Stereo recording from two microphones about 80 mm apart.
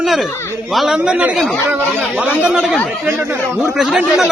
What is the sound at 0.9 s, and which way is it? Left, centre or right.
Speech, centre.